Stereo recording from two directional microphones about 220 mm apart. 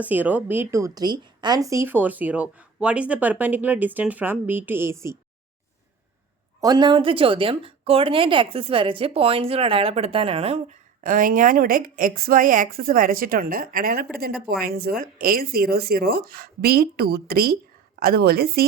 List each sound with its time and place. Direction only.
0.0 s speech: 5° right (ahead or behind)
6.6 s a woman's voice: 20° right (ahead or behind); by 18.6 s 45° right (ahead or behind)